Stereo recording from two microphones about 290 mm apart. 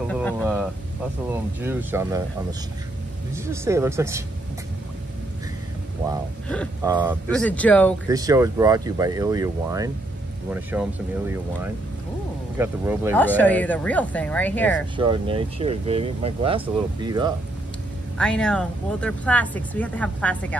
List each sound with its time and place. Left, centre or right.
0.4 s speech: centre
3.3 s speech: centre
6.8 s speech: centre
7.2 s speech: centre
8.1 s speech: centre
13.1 s speech: centre
15.0 s speech: centre
18.1 s speech: centre